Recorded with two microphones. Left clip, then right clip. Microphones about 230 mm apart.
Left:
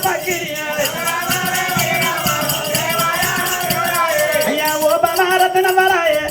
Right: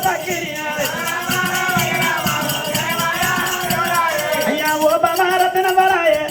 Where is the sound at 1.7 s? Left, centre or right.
Centre.